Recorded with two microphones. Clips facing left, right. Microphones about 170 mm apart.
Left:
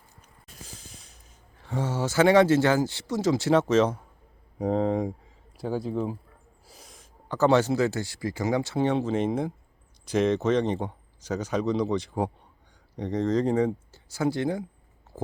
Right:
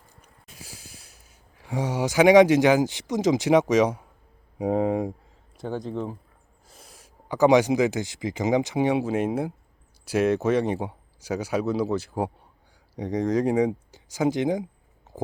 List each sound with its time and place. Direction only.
0.5 s speech: 10° right (ahead or behind)
5.5 s speech: 5° left (ahead or behind); by 14.6 s 15° right (ahead or behind)
15.1 s stomach rumble: 15° right (ahead or behind)